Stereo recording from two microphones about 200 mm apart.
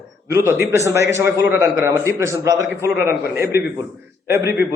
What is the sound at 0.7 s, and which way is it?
A man's voice, 15° right (ahead or behind).